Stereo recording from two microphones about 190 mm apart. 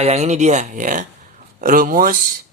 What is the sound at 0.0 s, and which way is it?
Speech, 35° right (ahead or behind).